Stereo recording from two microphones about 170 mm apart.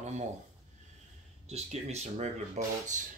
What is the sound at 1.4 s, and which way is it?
Speech, 40° right (ahead or behind).